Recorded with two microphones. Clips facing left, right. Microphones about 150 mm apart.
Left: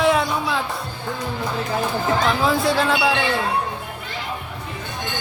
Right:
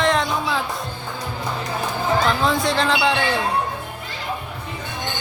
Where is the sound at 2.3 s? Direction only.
5° left (ahead or behind).